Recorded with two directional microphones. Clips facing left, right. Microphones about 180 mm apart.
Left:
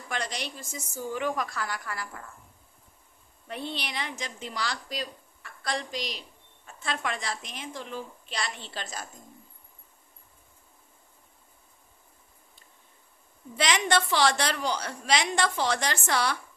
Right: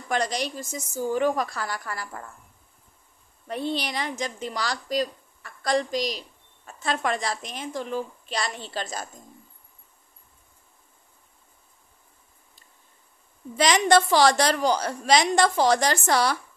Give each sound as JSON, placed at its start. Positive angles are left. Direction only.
{"t": 0.1, "sound": "a woman's voice", "side_deg": -40}
{"t": 3.4, "sound": "a woman's voice", "side_deg": -40}
{"t": 13.6, "sound": "a woman's voice", "side_deg": -40}